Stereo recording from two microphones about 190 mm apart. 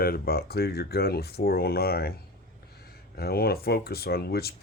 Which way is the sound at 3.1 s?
55° left (ahead or behind).